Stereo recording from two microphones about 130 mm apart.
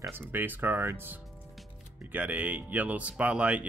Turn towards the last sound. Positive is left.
turn(degrees=-10)  # may be behind; listen again after turning